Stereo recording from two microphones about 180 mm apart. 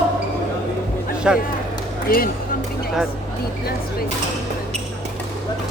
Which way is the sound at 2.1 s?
55° left (ahead or behind).